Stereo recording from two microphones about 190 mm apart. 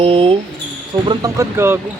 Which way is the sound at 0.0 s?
30° right (ahead or behind).